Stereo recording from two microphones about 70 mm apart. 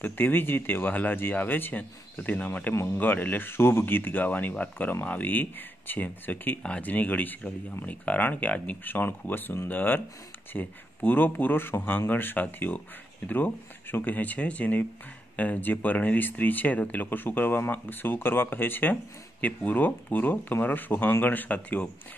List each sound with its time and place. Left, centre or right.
0.0 s speech: left
2.7 s speech: left
3.0 s speech: left